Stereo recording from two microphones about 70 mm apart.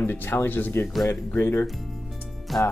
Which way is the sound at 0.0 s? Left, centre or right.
Left.